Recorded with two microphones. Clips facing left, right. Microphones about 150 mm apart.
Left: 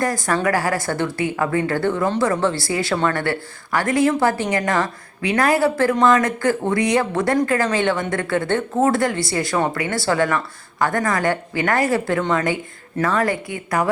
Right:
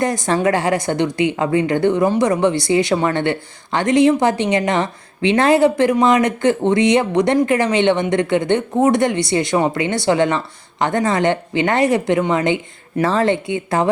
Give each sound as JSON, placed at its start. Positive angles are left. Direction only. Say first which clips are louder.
{"t": 0.0, "sound": "a woman's voice", "louder": "right 3 dB", "side_deg": -20}